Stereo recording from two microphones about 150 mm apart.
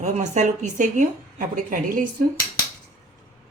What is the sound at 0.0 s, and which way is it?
A woman's voice, 50° right (ahead or behind).